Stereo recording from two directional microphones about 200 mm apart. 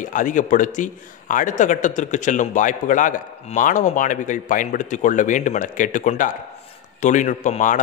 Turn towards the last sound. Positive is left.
turn(degrees=40)  # may be behind; listen again after turning